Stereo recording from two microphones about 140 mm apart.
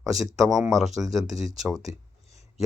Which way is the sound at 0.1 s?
Centre (ahead or behind).